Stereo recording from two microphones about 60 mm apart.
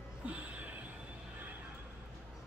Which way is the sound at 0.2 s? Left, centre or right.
Right.